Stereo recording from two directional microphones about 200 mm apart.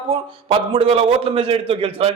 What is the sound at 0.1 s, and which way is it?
A man's voice, 25° right (ahead or behind).